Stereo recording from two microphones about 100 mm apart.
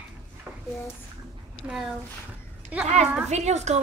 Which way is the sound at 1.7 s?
5° right (ahead or behind).